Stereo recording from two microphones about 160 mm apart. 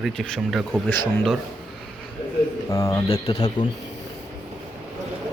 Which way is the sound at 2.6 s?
20° left (ahead or behind).